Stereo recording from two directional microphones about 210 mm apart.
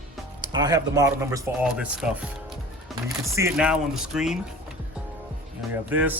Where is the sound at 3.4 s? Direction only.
10° right (ahead or behind).